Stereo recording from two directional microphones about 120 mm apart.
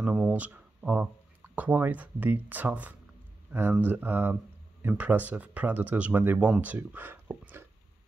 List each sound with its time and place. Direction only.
0.0 s speech: 10° right (ahead or behind)